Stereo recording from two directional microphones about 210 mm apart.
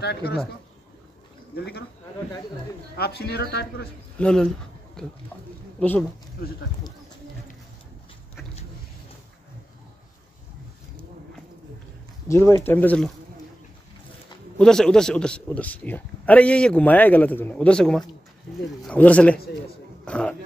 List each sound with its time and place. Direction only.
0.0 s speech: 50° left (ahead or behind)
1.5 s speech: 50° left (ahead or behind)
3.0 s speech: 50° left (ahead or behind)
4.2 s a man's voice: 5° left (ahead or behind)
12.3 s speech: 15° left (ahead or behind)
14.6 s a man's voice: 5° left (ahead or behind)
20.1 s a sound: 5° left (ahead or behind)